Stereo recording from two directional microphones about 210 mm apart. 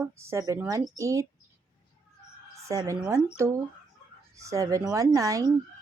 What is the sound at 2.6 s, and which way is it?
Speech, 15° right (ahead or behind).